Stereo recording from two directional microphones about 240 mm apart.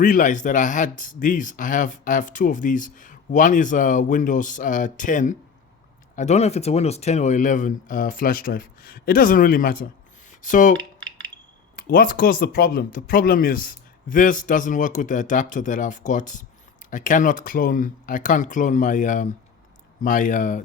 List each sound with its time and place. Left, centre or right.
0.0 s speech: left
11.8 s speech: left